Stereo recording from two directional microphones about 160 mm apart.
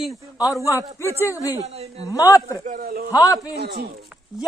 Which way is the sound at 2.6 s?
60° right (ahead or behind).